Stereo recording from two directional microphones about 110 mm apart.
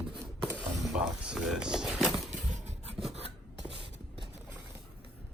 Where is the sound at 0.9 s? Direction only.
10° right (ahead or behind).